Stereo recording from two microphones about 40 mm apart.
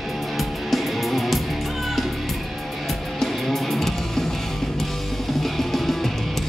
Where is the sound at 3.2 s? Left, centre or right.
Centre.